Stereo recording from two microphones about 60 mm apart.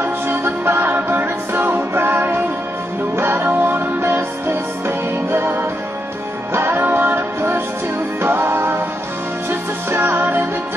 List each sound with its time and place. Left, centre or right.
0.0 s music: right